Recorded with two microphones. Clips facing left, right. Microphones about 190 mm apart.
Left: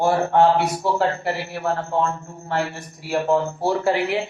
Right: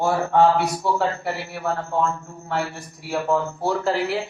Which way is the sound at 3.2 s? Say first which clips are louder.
Left 2 dB; 25° left (ahead or behind).